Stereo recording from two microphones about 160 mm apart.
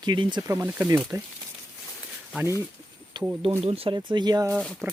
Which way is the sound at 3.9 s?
25° right (ahead or behind).